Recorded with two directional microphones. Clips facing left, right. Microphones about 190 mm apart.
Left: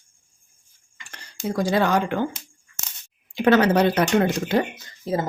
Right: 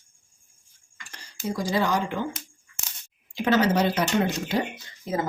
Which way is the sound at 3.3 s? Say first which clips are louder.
Left 5 dB; 60° left (ahead or behind).